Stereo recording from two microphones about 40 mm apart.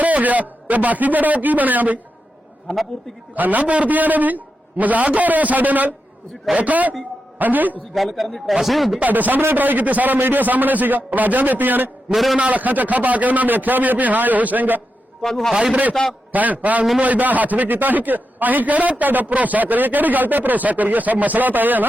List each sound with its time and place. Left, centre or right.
0.0 s a man's voice: right
3.3 s a man's voice: right
7.9 s a man's voice: centre
9.0 s a man's voice: right
9.4 s a man's voice: right
12.1 s a man's voice: centre
12.4 s a man's voice: right
15.2 s a man's voice: centre
15.7 s a man's voice: right